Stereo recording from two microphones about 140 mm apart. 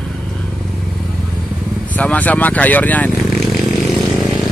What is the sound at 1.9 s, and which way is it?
Speech, 10° left (ahead or behind).